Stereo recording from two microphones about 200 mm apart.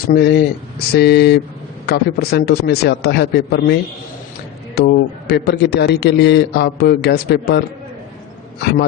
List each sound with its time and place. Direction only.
0.1 s a man's voice: 55° left (ahead or behind)